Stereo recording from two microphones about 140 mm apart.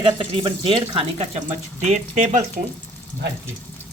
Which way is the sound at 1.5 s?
55° right (ahead or behind).